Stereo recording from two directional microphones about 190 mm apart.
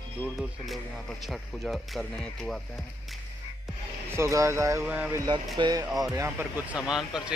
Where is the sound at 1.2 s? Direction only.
Centre (ahead or behind).